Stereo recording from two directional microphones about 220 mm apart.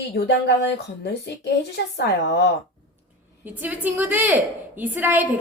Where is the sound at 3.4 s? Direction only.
10° right (ahead or behind).